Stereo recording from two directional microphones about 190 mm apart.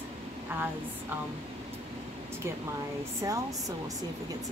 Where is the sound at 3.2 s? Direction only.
10° right (ahead or behind).